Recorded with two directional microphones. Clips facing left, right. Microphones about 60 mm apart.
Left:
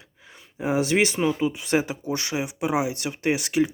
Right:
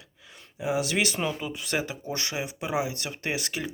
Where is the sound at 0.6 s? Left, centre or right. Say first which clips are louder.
Left 5 dB; left.